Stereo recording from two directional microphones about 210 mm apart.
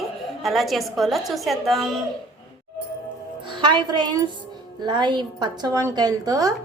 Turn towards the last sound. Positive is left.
turn(degrees=-15)  # may be behind; listen again after turning